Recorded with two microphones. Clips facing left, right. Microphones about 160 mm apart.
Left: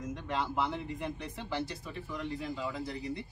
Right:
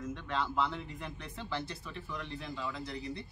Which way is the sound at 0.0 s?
10° left (ahead or behind).